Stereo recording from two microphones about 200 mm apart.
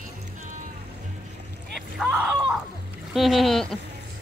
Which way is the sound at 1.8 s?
Centre (ahead or behind).